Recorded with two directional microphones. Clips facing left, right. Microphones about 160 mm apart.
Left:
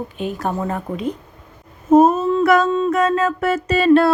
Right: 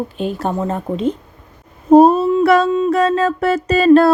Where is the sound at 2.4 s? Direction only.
30° right (ahead or behind).